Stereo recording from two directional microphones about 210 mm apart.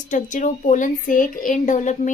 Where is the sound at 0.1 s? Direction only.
35° left (ahead or behind).